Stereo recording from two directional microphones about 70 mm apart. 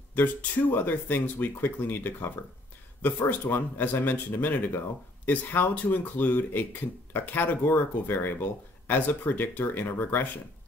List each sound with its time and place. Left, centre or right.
0.1 s speech: left